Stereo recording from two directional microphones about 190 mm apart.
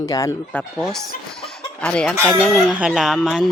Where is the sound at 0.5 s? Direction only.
Centre (ahead or behind).